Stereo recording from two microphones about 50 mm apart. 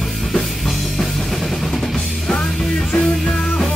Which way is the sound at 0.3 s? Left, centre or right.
Centre.